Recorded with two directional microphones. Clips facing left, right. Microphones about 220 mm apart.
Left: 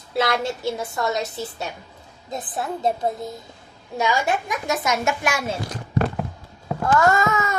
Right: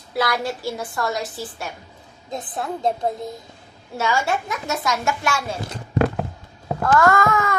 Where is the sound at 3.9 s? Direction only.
15° left (ahead or behind).